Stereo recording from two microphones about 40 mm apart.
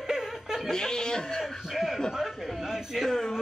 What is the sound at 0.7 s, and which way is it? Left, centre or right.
Speech, centre.